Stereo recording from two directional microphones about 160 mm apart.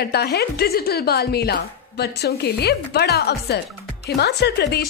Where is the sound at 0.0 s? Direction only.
90° left.